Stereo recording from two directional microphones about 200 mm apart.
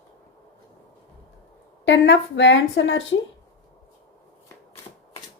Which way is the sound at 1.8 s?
65° left (ahead or behind).